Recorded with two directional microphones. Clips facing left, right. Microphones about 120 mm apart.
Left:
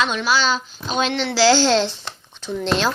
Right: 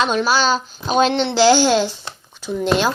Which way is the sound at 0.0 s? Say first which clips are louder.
Right 3 dB; 40° right (ahead or behind).